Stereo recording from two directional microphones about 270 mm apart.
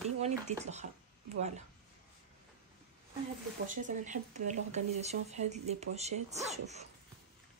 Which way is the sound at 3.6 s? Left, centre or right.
Right.